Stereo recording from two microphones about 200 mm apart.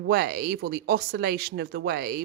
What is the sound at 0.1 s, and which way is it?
Speech, 50° right (ahead or behind).